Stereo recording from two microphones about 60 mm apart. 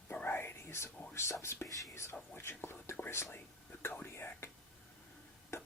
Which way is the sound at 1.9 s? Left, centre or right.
Left.